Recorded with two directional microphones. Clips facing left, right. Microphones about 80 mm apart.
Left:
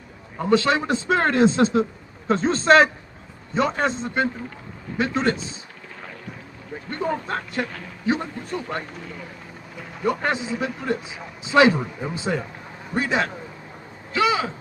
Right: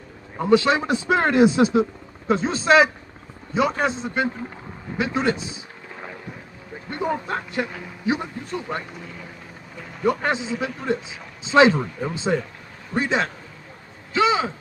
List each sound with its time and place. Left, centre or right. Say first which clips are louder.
0.4 s a man's voice: right 2 dB; centre
6.9 s a man's voice: right 1 dB; centre
10.0 s a man's voice: right 1 dB; centre
10.4 s a man's voice: even; centre
11.4 s a man's voice: right 1 dB; right
14.1 s a sound: right 1 dB; right